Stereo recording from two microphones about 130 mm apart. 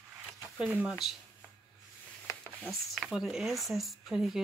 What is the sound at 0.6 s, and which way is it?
Speech, 5° right (ahead or behind).